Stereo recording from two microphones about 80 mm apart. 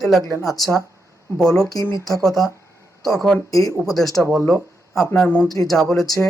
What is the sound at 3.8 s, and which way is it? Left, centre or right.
Speech, centre.